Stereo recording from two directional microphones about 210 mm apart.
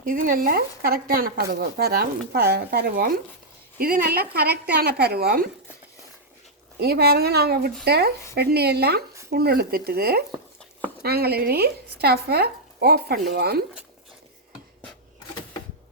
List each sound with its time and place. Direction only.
0.0 s speech: 40° right (ahead or behind)
6.7 s speech: 50° right (ahead or behind)